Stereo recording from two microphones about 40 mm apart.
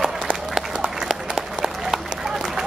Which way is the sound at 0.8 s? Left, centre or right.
Centre.